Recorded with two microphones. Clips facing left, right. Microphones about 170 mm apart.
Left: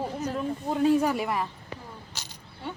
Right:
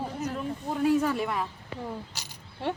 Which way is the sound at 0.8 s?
15° left (ahead or behind).